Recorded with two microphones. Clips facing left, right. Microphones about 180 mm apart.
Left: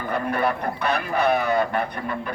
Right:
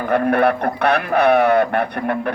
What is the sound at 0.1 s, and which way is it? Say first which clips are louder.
A man's voice: right 8 dB; 65° right (ahead or behind).